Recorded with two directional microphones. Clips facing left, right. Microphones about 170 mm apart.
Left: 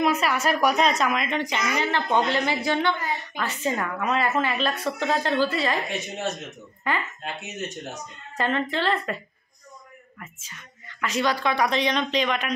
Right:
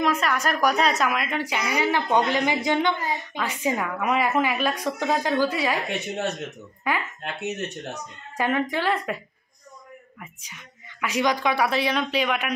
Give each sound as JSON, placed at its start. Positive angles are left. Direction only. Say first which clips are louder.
{"t": 0.0, "sound": "a woman's voice", "louder": "left 1 dB", "side_deg": 5}
{"t": 5.9, "sound": "speech", "louder": "right 2 dB", "side_deg": -65}
{"t": 6.8, "sound": "speech", "louder": "right 1 dB", "side_deg": -10}
{"t": 7.4, "sound": "speech", "louder": "right 4 dB", "side_deg": -65}
{"t": 8.4, "sound": "speech", "louder": "right 1 dB", "side_deg": -10}